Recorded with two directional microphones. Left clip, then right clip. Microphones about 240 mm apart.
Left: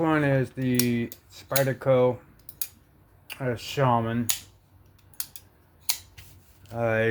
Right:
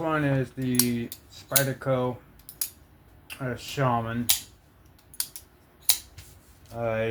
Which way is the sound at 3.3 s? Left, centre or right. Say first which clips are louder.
Left 3 dB; left.